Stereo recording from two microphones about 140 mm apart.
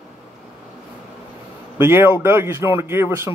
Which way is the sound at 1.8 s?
15° right (ahead or behind).